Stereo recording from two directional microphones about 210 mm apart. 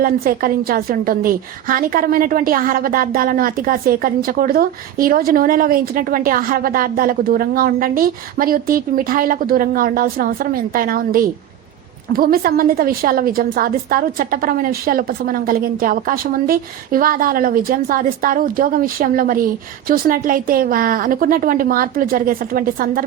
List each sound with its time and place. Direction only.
0.0 s a woman's voice: 45° right (ahead or behind)